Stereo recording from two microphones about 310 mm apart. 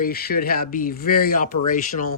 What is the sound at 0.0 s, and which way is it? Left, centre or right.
Speech, left.